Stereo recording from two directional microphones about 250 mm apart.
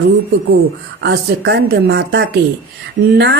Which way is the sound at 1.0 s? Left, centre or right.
Right.